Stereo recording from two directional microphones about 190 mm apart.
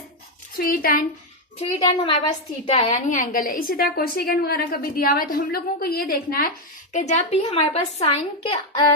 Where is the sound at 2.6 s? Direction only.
35° left (ahead or behind); by 6.5 s 50° left (ahead or behind).